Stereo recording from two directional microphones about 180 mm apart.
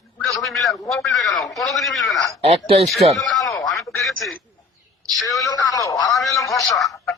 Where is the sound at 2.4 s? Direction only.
30° right (ahead or behind).